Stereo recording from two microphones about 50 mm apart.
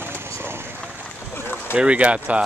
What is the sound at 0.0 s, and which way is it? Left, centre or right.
Vehicle, right.